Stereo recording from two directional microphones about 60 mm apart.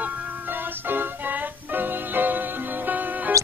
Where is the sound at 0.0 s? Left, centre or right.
Right.